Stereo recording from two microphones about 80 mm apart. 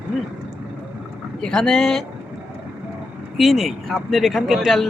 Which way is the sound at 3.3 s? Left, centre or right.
Centre.